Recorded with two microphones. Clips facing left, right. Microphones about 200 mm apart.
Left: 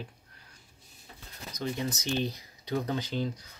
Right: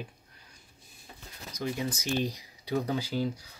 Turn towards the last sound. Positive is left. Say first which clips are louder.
# right 2 dB
turn(degrees=-10)  # may be behind; listen again after turning